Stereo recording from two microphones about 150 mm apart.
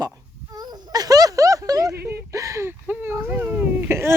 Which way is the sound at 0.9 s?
25° right (ahead or behind).